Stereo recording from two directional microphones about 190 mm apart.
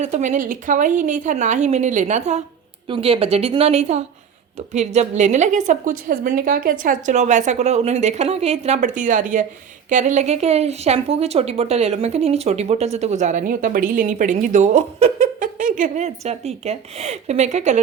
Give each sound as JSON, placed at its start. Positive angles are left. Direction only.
{"t": 0.0, "sound": "a woman's voice", "side_deg": -40}